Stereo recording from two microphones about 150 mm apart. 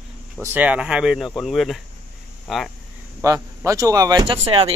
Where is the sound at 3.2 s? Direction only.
20° right (ahead or behind).